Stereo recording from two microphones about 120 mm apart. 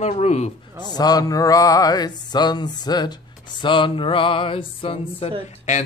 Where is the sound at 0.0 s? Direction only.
65° left (ahead or behind).